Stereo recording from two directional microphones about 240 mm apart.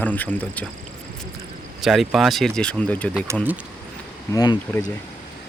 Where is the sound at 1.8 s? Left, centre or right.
Centre.